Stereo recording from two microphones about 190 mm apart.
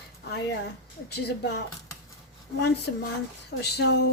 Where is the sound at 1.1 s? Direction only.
60° left (ahead or behind).